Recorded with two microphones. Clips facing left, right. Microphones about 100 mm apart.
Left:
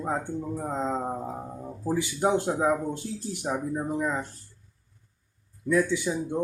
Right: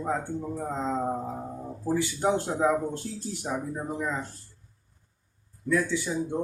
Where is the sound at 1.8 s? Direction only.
15° left (ahead or behind).